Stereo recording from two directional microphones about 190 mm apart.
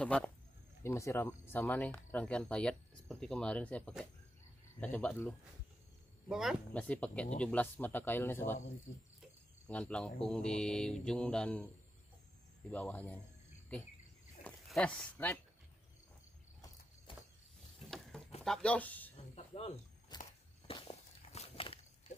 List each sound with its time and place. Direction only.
0.0 s speech: 5° left (ahead or behind)
6.2 s speech: centre (ahead or behind)
9.7 s speech: 5° left (ahead or behind)
12.7 s speech: 10° left (ahead or behind)
14.4 s a sound: 5° left (ahead or behind)
17.8 s livestock: centre (ahead or behind)
18.4 s speech: 5° left (ahead or behind)
19.1 s snake: 35° left (ahead or behind)
20.1 s a sound: 20° left (ahead or behind)
20.6 s walk: 30° left (ahead or behind)